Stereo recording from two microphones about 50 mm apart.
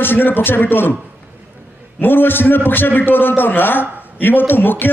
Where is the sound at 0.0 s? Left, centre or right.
Left.